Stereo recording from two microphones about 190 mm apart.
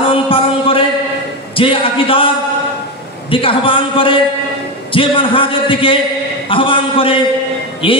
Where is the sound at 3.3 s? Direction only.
30° left (ahead or behind).